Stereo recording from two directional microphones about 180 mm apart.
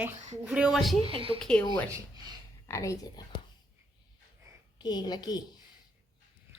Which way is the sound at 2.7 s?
15° left (ahead or behind).